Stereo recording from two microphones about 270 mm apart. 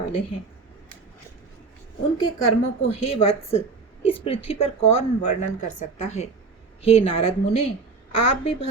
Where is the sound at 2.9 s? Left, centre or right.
Left.